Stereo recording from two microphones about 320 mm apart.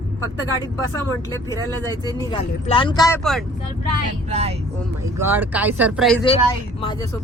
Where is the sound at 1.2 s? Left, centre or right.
Centre.